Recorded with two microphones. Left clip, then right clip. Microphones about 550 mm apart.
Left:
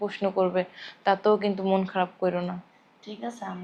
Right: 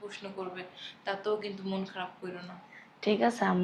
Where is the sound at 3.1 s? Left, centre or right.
Right.